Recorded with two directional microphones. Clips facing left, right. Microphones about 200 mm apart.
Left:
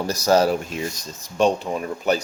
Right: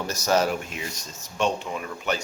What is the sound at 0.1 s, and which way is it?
Speech, 35° left (ahead or behind).